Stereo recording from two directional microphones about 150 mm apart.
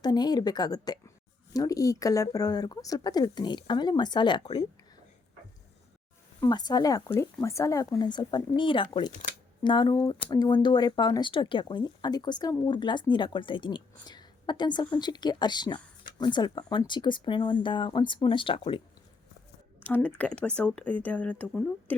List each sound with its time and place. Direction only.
0.0 s speech: 25° left (ahead or behind)
6.4 s speech: 30° left (ahead or behind)
19.8 s speech: 10° left (ahead or behind)